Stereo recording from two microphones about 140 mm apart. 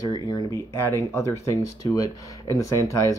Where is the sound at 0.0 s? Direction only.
30° left (ahead or behind).